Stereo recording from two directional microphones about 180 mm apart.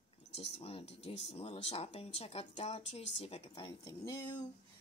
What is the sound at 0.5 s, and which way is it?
Speech, 30° left (ahead or behind).